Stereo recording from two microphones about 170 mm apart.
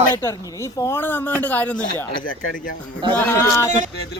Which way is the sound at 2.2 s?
50° left (ahead or behind).